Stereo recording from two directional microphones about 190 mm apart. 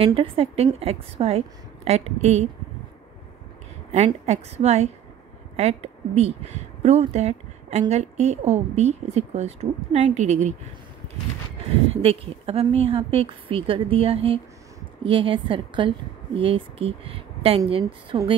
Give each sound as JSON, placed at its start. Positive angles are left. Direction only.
{"t": 0.0, "sound": "speech", "side_deg": -30}
{"t": 3.9, "sound": "speech", "side_deg": -35}
{"t": 11.9, "sound": "a woman's voice", "side_deg": -30}